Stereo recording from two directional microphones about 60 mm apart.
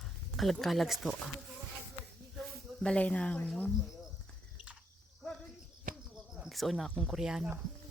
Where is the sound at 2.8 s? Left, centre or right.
Centre.